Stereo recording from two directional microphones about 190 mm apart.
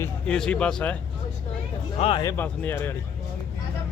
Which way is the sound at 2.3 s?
10° left (ahead or behind).